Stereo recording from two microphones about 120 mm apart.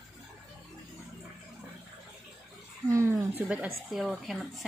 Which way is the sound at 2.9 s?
20° right (ahead or behind).